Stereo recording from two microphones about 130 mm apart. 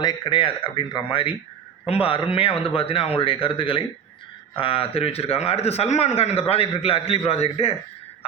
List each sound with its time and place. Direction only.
0.0 s a man's voice: 35° left (ahead or behind); by 7.8 s 50° left (ahead or behind)